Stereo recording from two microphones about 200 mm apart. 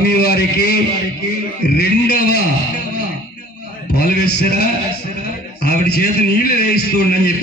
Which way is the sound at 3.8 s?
50° left (ahead or behind).